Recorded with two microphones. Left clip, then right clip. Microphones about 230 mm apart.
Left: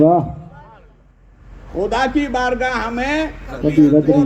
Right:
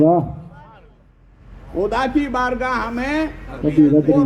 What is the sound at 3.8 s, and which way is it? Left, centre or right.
Speech, left.